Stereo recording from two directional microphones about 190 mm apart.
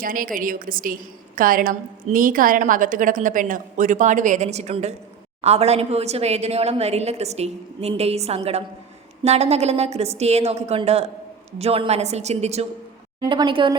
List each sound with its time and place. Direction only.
0.0 s a woman's voice: 45° right (ahead or behind); by 13.7 s 25° right (ahead or behind)